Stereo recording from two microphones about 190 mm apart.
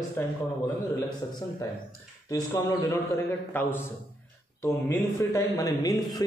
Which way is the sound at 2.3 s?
20° left (ahead or behind).